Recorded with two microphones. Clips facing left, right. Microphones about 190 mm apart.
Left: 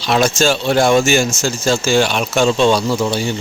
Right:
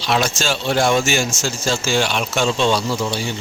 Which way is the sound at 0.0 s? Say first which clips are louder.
Left 5 dB; 45° left (ahead or behind).